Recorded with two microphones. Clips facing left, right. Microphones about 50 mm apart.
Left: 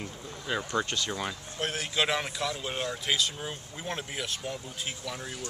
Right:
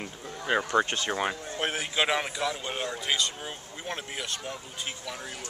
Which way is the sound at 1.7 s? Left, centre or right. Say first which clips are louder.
Right 1 dB; centre.